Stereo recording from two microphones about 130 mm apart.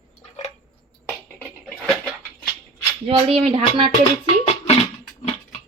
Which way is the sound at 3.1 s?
45° right (ahead or behind).